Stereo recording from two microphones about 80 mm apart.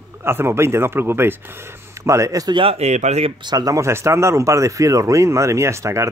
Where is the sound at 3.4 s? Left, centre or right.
Right.